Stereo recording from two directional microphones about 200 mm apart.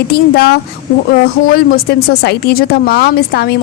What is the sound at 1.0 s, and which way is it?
Speech, 50° left (ahead or behind).